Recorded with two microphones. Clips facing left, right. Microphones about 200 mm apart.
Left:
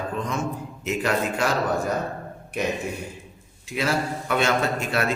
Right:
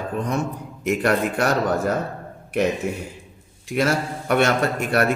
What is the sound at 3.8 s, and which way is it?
Speech, 55° right (ahead or behind).